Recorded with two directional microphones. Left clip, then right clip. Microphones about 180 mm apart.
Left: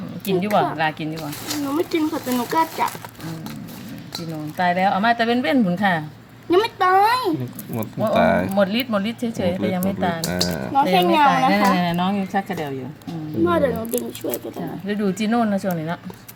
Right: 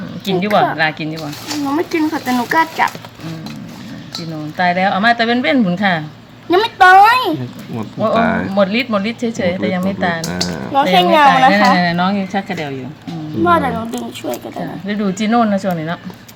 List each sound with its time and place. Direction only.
0.4 s a woman's voice: 5° right (ahead or behind)
4.5 s speech: 5° left (ahead or behind)
6.5 s a woman's voice: 10° right (ahead or behind)
8.1 s speech: 35° left (ahead or behind)
8.5 s a woman's voice: 5° left (ahead or behind)
10.2 s speech: 25° left (ahead or behind)
10.9 s a woman's voice: 20° right (ahead or behind)
11.3 s a woman's voice: 10° left (ahead or behind)
13.4 s speech: 30° right (ahead or behind)
14.8 s speech: 10° left (ahead or behind)